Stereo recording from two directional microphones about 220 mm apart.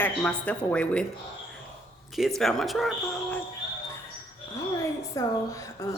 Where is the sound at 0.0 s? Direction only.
5° left (ahead or behind).